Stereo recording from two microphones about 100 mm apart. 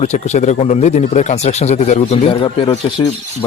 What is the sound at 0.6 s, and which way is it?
Speech, 90° left.